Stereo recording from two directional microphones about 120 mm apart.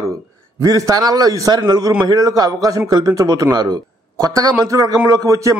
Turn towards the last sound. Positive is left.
turn(degrees=-30)  # may be behind; listen again after turning